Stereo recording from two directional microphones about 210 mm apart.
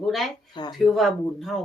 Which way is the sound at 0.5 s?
20° left (ahead or behind).